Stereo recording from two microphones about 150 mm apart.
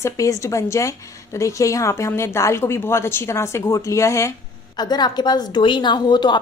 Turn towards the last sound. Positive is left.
turn(degrees=30)  # may be behind; listen again after turning